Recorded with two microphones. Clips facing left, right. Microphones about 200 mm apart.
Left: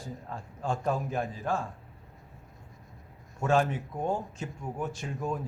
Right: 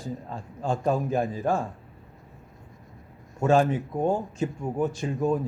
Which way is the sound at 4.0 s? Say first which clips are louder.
Right 6 dB; 35° right (ahead or behind).